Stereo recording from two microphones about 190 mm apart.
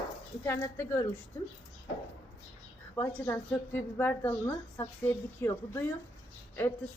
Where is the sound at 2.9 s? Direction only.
15° left (ahead or behind).